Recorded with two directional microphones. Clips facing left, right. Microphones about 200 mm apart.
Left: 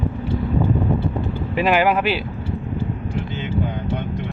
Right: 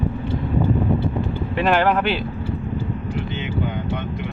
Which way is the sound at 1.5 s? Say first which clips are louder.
Left 1 dB; 5° left (ahead or behind).